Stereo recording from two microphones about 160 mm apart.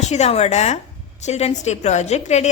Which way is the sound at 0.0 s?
45° left (ahead or behind).